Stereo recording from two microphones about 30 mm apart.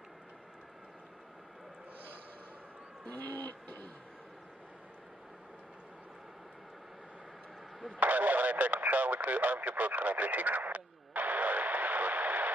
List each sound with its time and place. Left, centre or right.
3.1 s music: left
8.0 s radio: right